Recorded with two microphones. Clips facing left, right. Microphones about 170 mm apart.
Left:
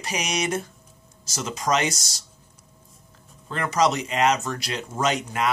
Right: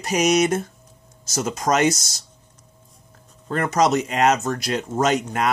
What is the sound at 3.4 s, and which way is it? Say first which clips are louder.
Speech: right 3 dB; 45° right (ahead or behind).